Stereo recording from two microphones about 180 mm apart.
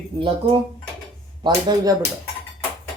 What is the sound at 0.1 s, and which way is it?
Speech, 25° right (ahead or behind).